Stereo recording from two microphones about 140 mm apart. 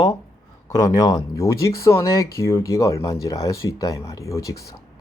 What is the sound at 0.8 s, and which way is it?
Speech, 25° left (ahead or behind).